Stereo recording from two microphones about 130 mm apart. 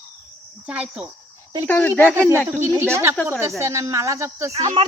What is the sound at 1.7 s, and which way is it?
Speech, 15° left (ahead or behind).